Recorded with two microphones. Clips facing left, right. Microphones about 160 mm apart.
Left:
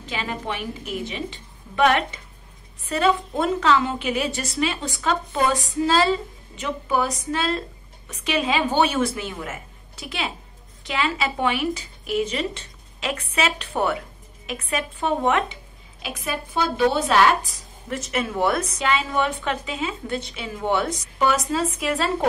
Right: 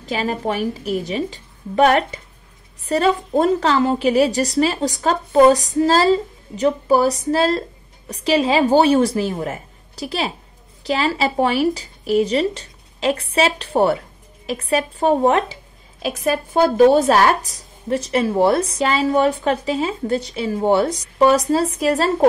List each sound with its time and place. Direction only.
0.0 s speech: 40° right (ahead or behind)